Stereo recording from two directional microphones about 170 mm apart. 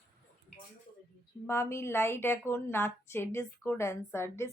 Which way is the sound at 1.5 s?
15° left (ahead or behind).